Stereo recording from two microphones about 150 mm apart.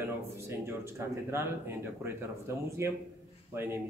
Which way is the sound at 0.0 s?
15° right (ahead or behind).